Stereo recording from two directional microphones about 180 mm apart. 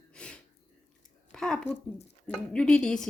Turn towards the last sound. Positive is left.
turn(degrees=5)  # may be behind; listen again after turning